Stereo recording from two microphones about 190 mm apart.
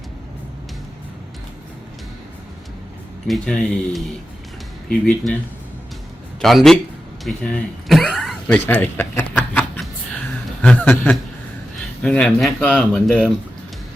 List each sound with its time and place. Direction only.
3.2 s speech: centre (ahead or behind)
6.4 s speech: centre (ahead or behind)